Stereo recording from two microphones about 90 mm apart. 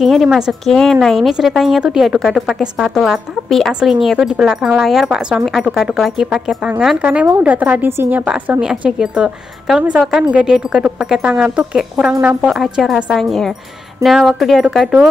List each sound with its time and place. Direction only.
0.0 s a woman's voice: centre (ahead or behind); by 8.3 s 20° right (ahead or behind)
8.3 s a woman's voice: 10° right (ahead or behind)